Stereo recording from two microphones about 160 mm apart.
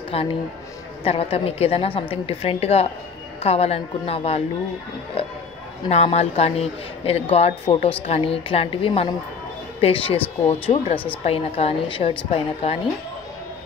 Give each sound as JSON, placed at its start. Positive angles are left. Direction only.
{"t": 0.1, "sound": "a woman's voice", "side_deg": 35}
{"t": 5.2, "sound": "music", "side_deg": 35}
{"t": 5.9, "sound": "a woman's voice", "side_deg": 40}